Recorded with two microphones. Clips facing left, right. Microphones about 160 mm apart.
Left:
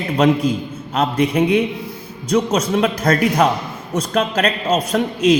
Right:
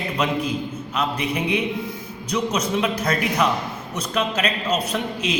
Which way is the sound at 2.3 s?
50° left (ahead or behind).